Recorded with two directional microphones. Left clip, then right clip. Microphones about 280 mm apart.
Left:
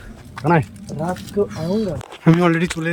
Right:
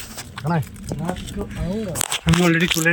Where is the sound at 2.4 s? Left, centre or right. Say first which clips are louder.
Right 1 dB; centre.